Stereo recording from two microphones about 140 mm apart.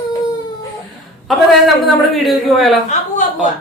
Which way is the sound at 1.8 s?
Centre (ahead or behind).